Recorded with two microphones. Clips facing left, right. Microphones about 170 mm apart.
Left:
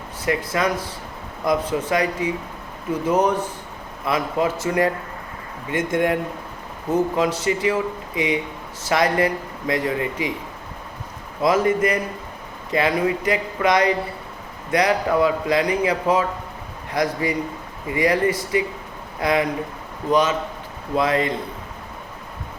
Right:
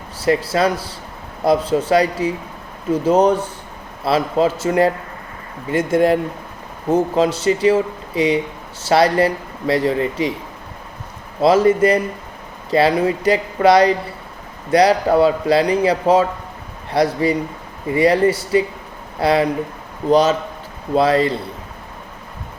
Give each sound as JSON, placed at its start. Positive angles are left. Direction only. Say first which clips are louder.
{"t": 0.5, "sound": "speech", "louder": "right 4 dB", "side_deg": -30}
{"t": 11.3, "sound": "speech", "louder": "right 5 dB", "side_deg": -30}